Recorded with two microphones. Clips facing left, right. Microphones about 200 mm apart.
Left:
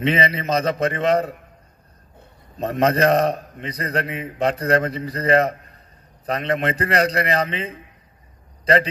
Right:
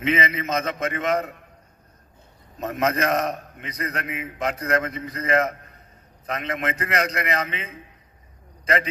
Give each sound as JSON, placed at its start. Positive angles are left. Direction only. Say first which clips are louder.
{"t": 0.0, "sound": "a man's voice", "louder": "left 3 dB", "side_deg": 30}
{"t": 2.6, "sound": "a man's voice", "louder": "left 5 dB", "side_deg": 30}